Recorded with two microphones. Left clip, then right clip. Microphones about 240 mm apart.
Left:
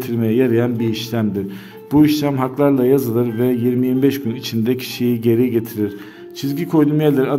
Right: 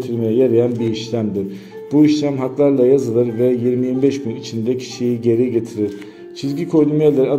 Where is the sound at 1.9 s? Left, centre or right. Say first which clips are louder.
Even; left.